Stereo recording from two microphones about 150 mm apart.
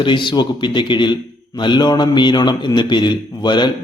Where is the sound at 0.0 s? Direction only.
35° left (ahead or behind).